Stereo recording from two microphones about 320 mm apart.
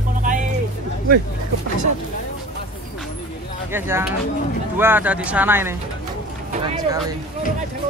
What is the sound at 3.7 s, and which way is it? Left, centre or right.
Speech, centre.